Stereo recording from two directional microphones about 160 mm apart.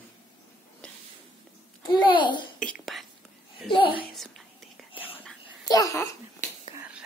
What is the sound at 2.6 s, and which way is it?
Whispering, centre (ahead or behind).